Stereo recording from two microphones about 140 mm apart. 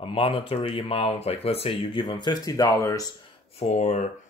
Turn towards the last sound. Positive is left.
turn(degrees=55)  # may be behind; listen again after turning